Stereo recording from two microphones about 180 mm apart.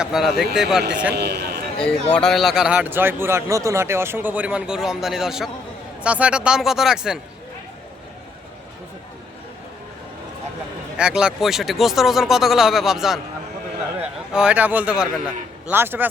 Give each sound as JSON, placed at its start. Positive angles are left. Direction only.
{"t": 0.0, "sound": "a man's voice", "side_deg": 0}
{"t": 1.1, "sound": "a man's voice", "side_deg": -65}
{"t": 1.8, "sound": "a man's voice", "side_deg": 5}
{"t": 10.9, "sound": "a man's voice", "side_deg": -5}
{"t": 14.3, "sound": "a man's voice", "side_deg": -5}